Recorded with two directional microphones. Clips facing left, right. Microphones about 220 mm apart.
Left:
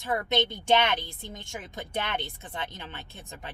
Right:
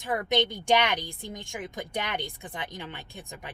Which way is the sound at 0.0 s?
15° right (ahead or behind).